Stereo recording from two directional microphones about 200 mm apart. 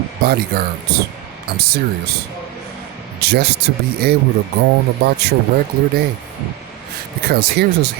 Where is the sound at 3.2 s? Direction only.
55° right (ahead or behind).